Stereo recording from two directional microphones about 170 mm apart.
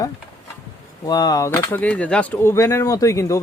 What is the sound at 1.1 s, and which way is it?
Speech, 20° left (ahead or behind).